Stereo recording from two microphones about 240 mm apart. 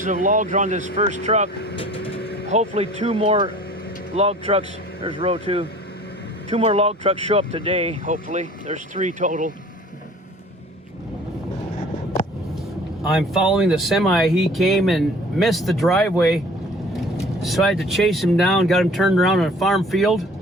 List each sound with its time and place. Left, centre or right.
0.0 s speech: right
1.8 s vehicle: left
2.2 s vehicle: left
2.5 s speech: right
13.1 s speech: centre
17.4 s speech: centre